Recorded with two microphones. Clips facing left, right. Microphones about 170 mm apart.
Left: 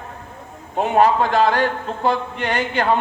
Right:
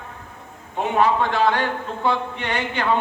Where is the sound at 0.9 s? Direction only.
40° left (ahead or behind).